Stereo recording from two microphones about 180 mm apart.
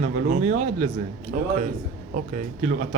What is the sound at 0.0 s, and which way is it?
A man's voice, 40° right (ahead or behind).